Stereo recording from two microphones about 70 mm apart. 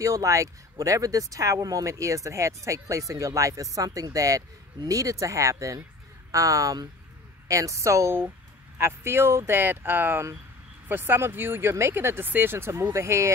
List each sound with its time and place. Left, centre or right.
0.0 s speech: right